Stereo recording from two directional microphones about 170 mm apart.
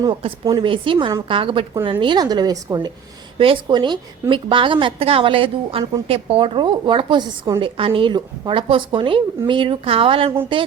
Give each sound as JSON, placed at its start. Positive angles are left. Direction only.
{"t": 0.0, "sound": "a woman's voice", "side_deg": -30}